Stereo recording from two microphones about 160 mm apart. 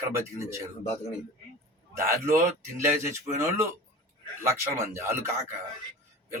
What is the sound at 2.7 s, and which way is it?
A man's voice, 15° right (ahead or behind).